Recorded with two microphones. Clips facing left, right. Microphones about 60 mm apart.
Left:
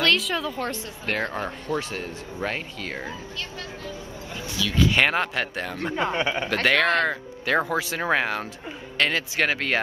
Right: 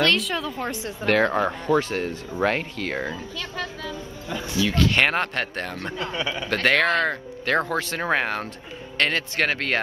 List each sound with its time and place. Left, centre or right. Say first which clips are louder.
0.0 s speech: right 1 dB; centre
1.2 s speech: right 7 dB; right
4.7 s speech: left 1 dB; centre
5.9 s speech: left 4 dB; left
6.5 s speech: right 1 dB; centre
8.1 s speech: even; centre